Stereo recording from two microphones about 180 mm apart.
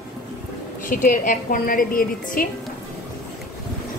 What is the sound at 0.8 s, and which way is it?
A woman's voice, 50° left (ahead or behind).